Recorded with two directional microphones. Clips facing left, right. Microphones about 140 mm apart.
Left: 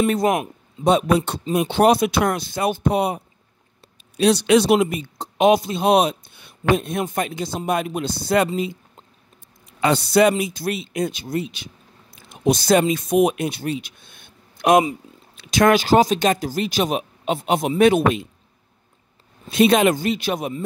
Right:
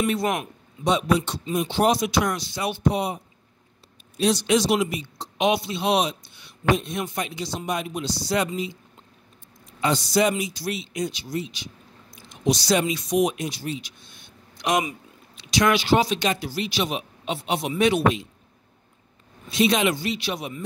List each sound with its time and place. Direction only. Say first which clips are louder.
0.0 s speech: left 5 dB; 45° left (ahead or behind)
1.5 s speech: left 5 dB; 65° left (ahead or behind)
4.2 s speech: left 5 dB; 65° left (ahead or behind)
9.7 s speech: left 4 dB; 65° left (ahead or behind)
19.5 s speech: left 6 dB; 55° left (ahead or behind)